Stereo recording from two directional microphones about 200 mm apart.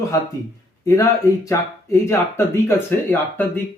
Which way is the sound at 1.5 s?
15° left (ahead or behind).